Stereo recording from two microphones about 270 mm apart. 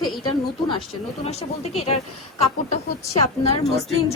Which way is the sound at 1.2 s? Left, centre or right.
Left.